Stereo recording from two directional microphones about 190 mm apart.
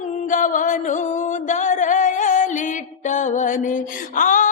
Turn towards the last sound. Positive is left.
turn(degrees=45)  # may be behind; listen again after turning